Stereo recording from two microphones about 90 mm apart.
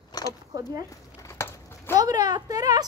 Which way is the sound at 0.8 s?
35° left (ahead or behind).